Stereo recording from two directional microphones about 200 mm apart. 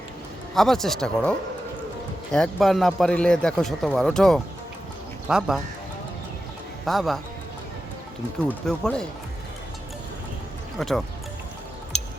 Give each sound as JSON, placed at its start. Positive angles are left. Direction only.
{"t": 0.5, "sound": "a man's voice", "side_deg": 0}
{"t": 6.8, "sound": "a man's voice", "side_deg": 0}
{"t": 8.4, "sound": "a man's voice", "side_deg": 5}
{"t": 10.8, "sound": "speech", "side_deg": 0}